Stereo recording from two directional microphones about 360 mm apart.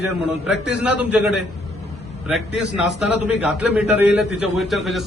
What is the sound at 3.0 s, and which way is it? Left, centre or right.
A man's voice, centre.